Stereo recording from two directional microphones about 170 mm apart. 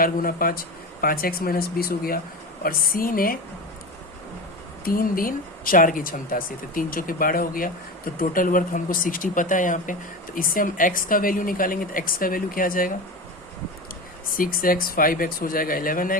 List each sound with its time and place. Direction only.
0.0 s speech: 55° left (ahead or behind)
4.9 s speech: 55° left (ahead or behind)
14.3 s speech: 55° left (ahead or behind)